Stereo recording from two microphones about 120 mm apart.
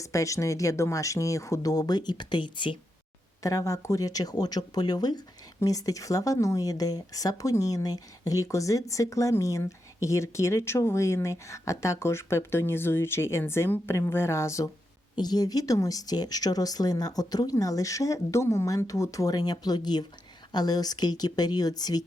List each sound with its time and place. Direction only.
0.0 s speech: 25° left (ahead or behind); by 2.7 s 40° left (ahead or behind)
3.4 s speech: 30° left (ahead or behind)